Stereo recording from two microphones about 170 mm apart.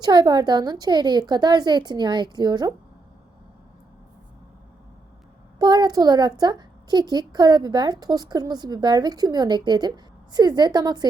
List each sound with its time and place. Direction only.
0.0 s a woman's voice: 25° right (ahead or behind)
5.5 s a woman's voice: 25° right (ahead or behind)